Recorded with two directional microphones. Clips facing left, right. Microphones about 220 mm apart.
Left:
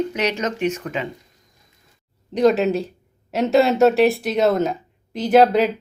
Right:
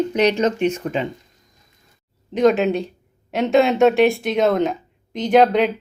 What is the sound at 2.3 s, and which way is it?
Speech, centre (ahead or behind).